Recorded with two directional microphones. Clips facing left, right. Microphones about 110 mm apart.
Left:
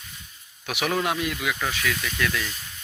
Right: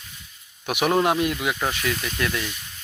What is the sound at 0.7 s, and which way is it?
Speech, 50° right (ahead or behind).